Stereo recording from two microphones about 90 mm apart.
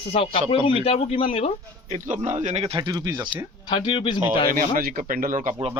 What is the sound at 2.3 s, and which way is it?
Speech, 90° right.